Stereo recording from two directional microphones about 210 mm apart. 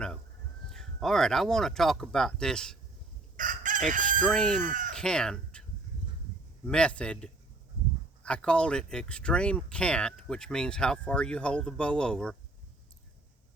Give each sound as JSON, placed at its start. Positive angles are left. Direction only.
{"t": 0.7, "sound": "speech", "side_deg": 0}
{"t": 3.3, "sound": "chicken", "side_deg": -40}
{"t": 4.2, "sound": "speech", "side_deg": 5}
{"t": 4.6, "sound": "chicken", "side_deg": -40}
{"t": 4.9, "sound": "speech", "side_deg": 5}
{"t": 6.7, "sound": "speech", "side_deg": 5}